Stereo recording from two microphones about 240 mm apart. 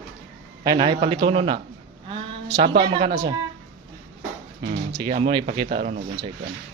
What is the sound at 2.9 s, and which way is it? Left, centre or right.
Speech, right.